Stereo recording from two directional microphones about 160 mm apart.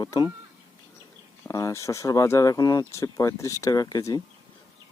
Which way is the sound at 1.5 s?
20° left (ahead or behind).